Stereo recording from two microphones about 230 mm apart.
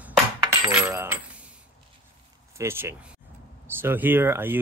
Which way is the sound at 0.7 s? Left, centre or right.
Centre.